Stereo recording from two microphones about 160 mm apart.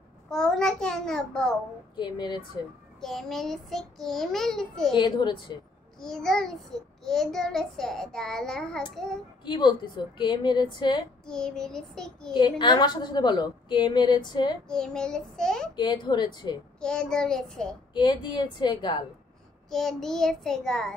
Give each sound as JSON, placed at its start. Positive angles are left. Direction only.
{"t": 0.3, "sound": "a child's voice", "side_deg": 5}
{"t": 2.0, "sound": "a woman's voice", "side_deg": 30}
{"t": 3.0, "sound": "a child's voice", "side_deg": 0}
{"t": 4.9, "sound": "a woman's voice", "side_deg": 30}
{"t": 5.9, "sound": "a child's voice", "side_deg": 5}
{"t": 9.4, "sound": "a woman's voice", "side_deg": 25}
{"t": 11.2, "sound": "a child's voice", "side_deg": 5}
{"t": 12.3, "sound": "a woman's voice", "side_deg": 25}
{"t": 14.7, "sound": "a child's voice", "side_deg": 5}
{"t": 15.7, "sound": "a woman's voice", "side_deg": 30}
{"t": 16.8, "sound": "a child's voice", "side_deg": 5}
{"t": 17.9, "sound": "a woman's voice", "side_deg": 30}
{"t": 19.7, "sound": "a child's voice", "side_deg": 0}